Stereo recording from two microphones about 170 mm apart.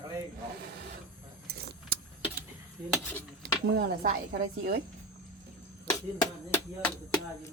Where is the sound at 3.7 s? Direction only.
70° right (ahead or behind).